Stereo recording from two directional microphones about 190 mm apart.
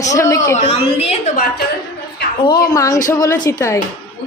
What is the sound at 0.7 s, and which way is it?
Speech, 30° left (ahead or behind).